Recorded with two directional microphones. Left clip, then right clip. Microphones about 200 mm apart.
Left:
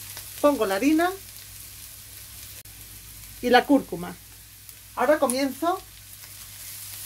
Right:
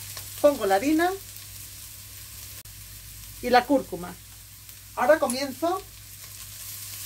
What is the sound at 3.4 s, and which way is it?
Speech, 50° left (ahead or behind).